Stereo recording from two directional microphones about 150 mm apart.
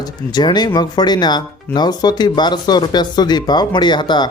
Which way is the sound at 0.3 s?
30° left (ahead or behind).